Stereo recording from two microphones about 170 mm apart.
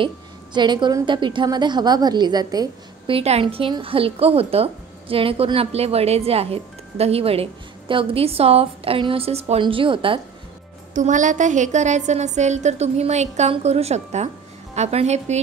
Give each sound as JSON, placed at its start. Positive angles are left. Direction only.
{"t": 0.0, "sound": "a woman's voice", "side_deg": -25}
{"t": 3.2, "sound": "a woman's voice", "side_deg": -35}
{"t": 11.0, "sound": "a woman's voice", "side_deg": -45}